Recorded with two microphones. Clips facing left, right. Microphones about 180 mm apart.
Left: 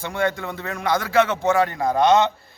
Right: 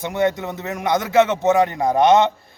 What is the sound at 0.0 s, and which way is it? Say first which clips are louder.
A man's voice: right 4 dB; 20° right (ahead or behind).